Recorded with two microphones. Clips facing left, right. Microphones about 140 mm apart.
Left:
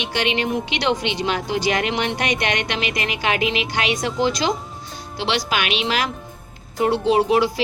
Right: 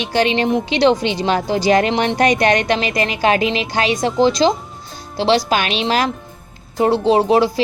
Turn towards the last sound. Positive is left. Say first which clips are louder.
# right 3 dB
turn(degrees=-30)  # may be behind; listen again after turning